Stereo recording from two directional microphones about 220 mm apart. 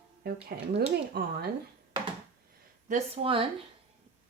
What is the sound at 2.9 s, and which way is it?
Speech, 25° right (ahead or behind).